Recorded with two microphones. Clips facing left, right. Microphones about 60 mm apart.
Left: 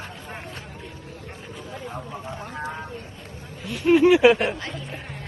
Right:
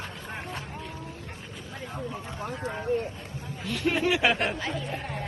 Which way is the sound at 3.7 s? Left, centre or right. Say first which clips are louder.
Left 10 dB; centre.